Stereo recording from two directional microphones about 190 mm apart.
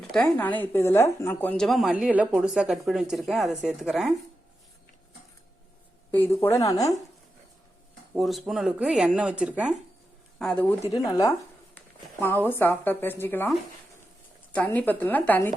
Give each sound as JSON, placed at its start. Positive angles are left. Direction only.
{"t": 0.1, "sound": "a woman's voice", "side_deg": 10}
{"t": 6.1, "sound": "speech", "side_deg": 10}
{"t": 8.1, "sound": "a woman's voice", "side_deg": 0}
{"t": 10.9, "sound": "speech", "side_deg": 20}
{"t": 12.5, "sound": "speech", "side_deg": 10}
{"t": 14.5, "sound": "speech", "side_deg": 10}